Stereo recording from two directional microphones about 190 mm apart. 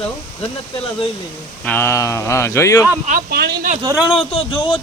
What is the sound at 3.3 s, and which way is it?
Speech, 55° right (ahead or behind).